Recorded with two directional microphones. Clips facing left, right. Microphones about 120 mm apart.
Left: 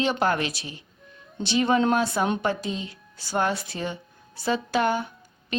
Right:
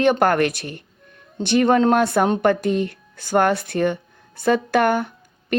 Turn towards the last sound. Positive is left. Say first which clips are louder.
# right 9 dB
turn(degrees=-55)  # may be behind; listen again after turning